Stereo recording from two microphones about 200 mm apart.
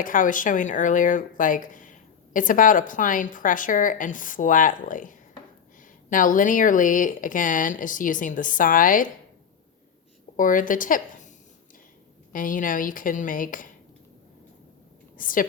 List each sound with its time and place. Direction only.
0.0 s speech: 40° left (ahead or behind)
10.3 s a woman's voice: 40° left (ahead or behind)
12.3 s a woman's voice: 40° left (ahead or behind)
15.2 s a woman's voice: 45° left (ahead or behind)